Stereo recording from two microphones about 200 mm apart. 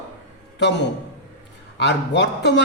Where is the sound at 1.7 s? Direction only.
60° left (ahead or behind).